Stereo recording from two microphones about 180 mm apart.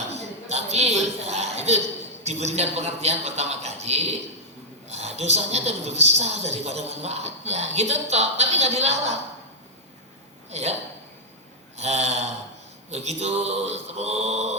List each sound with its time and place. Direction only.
0.1 s a sound: 35° right (ahead or behind)
2.2 s a woman's voice: 40° right (ahead or behind)
10.5 s a woman's voice: 35° right (ahead or behind)
11.8 s a woman's voice: 35° right (ahead or behind)